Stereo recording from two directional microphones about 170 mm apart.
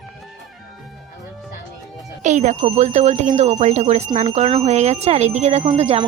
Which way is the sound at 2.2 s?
45° right (ahead or behind).